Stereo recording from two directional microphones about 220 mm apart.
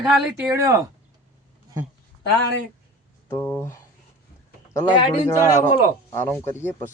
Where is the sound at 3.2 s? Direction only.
10° left (ahead or behind).